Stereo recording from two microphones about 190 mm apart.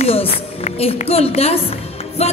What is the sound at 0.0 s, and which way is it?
A woman's voice, 30° left (ahead or behind).